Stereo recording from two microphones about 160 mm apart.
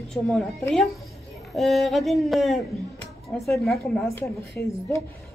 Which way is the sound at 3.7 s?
Centre (ahead or behind).